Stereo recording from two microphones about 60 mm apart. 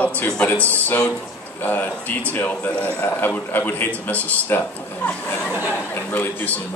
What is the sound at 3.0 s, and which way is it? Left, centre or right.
Speech, left.